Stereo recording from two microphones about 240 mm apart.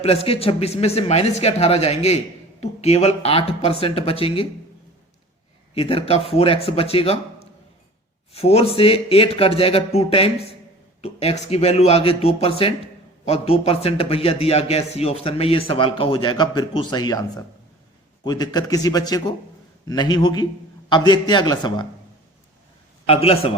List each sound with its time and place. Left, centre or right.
0.0 s speech: left
5.7 s speech: left
8.3 s speech: left
18.3 s speech: centre
23.0 s speech: left